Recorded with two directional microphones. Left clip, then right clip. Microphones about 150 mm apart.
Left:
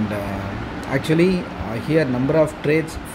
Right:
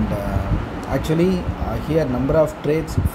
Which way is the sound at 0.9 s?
15° left (ahead or behind).